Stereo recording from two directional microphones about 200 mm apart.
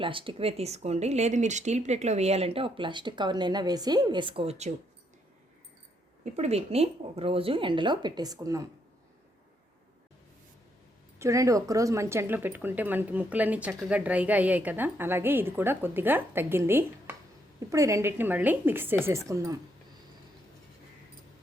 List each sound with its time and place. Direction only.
0.0 s speech: 25° right (ahead or behind)
6.2 s speech: 35° right (ahead or behind); by 8.6 s 20° right (ahead or behind)
11.2 s speech: 15° right (ahead or behind)